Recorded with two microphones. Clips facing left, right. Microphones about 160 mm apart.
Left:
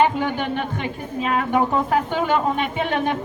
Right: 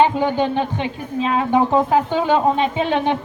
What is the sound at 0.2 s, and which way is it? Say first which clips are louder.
A woman's voice: right 5 dB; 20° right (ahead or behind).